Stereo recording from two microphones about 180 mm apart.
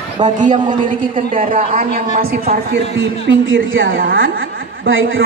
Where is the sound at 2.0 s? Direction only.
55° right (ahead or behind).